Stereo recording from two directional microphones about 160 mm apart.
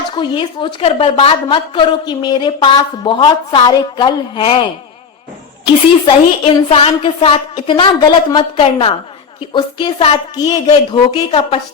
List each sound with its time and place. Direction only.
0.2 s a woman's voice: 30° left (ahead or behind)